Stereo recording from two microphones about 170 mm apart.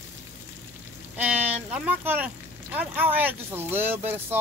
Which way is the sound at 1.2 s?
10° right (ahead or behind).